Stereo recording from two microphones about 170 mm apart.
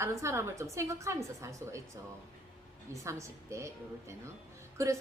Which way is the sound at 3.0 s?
15° right (ahead or behind).